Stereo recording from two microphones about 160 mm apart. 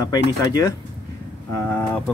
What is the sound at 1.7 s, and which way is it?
Speech, 10° left (ahead or behind).